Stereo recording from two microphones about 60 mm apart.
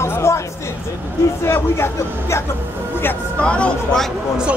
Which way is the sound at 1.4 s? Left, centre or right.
Left.